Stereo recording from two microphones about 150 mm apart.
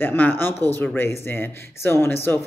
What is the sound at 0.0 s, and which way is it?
Speech, 15° left (ahead or behind).